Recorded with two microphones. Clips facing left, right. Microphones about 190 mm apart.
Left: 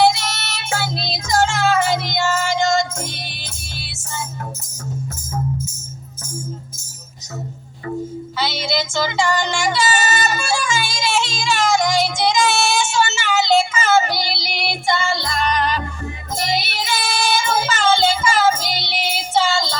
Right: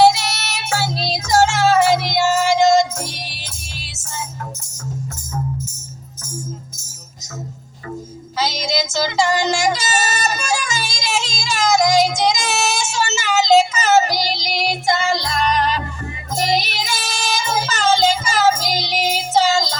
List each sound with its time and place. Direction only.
0.0 s child singing: 40° right (ahead or behind)
1.5 s music: 40° right (ahead or behind)
8.4 s music: 40° right (ahead or behind)
16.4 s child singing: 40° right (ahead or behind)